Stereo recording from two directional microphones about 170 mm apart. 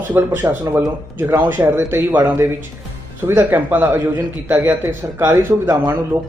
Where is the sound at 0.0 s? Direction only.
10° right (ahead or behind).